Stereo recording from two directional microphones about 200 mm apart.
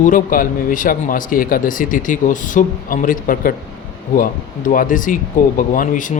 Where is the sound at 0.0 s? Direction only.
40° left (ahead or behind).